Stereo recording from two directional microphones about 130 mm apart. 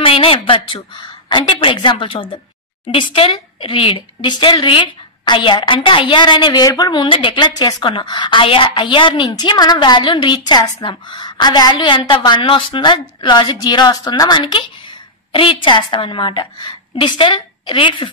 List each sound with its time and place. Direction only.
0.0 s a woman's voice: 45° left (ahead or behind)